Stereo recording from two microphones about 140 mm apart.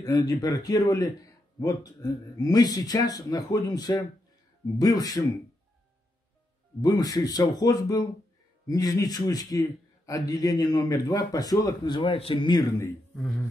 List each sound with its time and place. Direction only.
0.0 s a man's voice: 25° left (ahead or behind)
6.8 s a man's voice: 25° left (ahead or behind)
13.1 s speech: centre (ahead or behind)